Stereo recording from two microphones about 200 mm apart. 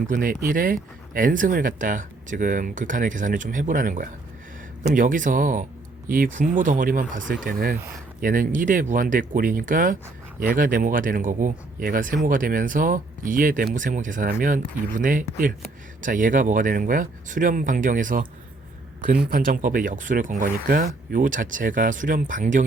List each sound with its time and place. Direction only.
0.1 s speech: 45° right (ahead or behind)
7.8 s speech: 10° right (ahead or behind)
8.2 s speech: 40° right (ahead or behind)
19.3 s speech: 45° right (ahead or behind)